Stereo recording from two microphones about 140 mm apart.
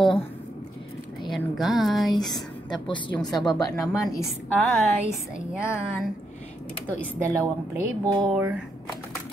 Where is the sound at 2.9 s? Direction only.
30° left (ahead or behind).